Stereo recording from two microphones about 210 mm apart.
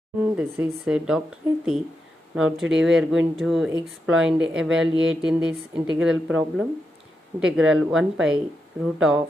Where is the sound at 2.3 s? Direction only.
Centre (ahead or behind).